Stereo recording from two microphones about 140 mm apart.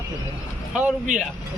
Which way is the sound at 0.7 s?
5° right (ahead or behind).